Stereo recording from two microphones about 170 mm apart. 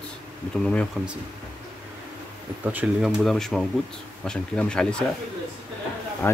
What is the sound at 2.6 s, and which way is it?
Speech, 10° right (ahead or behind).